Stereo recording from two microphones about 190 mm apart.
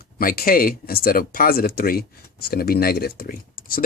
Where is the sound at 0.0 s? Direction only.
50° left (ahead or behind).